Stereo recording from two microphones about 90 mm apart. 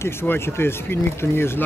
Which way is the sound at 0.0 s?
25° left (ahead or behind).